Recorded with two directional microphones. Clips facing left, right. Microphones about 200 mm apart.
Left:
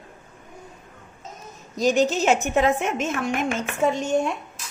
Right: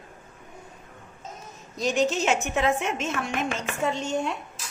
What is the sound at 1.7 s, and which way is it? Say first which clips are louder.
A woman's voice: left 4 dB; 40° left (ahead or behind).